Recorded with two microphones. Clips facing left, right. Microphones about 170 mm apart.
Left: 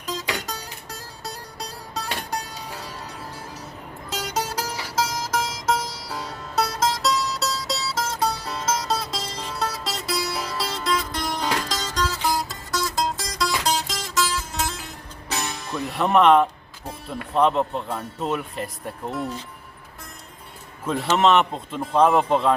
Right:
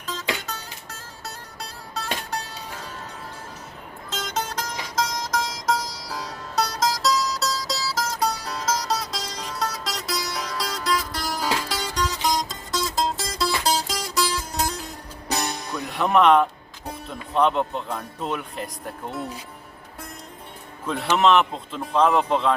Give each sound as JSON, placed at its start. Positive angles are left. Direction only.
{"t": 0.0, "sound": "music", "side_deg": 10}
{"t": 4.1, "sound": "music", "side_deg": 10}
{"t": 15.7, "sound": "music", "side_deg": 0}
{"t": 17.3, "sound": "speech", "side_deg": 0}
{"t": 20.8, "sound": "speech", "side_deg": 0}